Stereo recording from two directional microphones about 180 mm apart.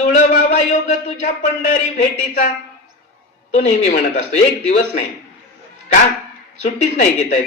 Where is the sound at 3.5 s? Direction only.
40° left (ahead or behind).